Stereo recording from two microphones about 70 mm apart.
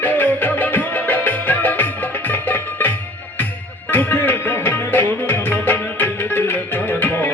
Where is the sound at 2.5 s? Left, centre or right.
Left.